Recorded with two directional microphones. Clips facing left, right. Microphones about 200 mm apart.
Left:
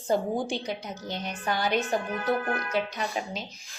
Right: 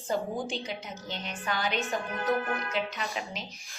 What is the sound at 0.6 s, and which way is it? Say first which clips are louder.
A woman's voice: left 4 dB; 40° left (ahead or behind).